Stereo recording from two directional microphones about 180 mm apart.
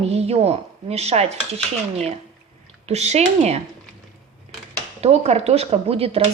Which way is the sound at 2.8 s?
35° right (ahead or behind).